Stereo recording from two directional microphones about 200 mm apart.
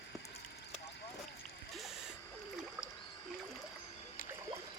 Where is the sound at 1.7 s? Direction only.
Centre (ahead or behind).